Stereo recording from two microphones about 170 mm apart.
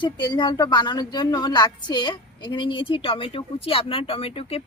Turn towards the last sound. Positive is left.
turn(degrees=35)  # may be behind; listen again after turning